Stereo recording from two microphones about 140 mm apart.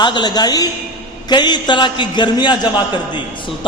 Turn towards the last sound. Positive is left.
turn(degrees=35)  # may be behind; listen again after turning